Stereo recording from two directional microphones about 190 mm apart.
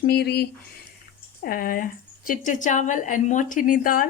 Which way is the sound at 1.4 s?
50° left (ahead or behind).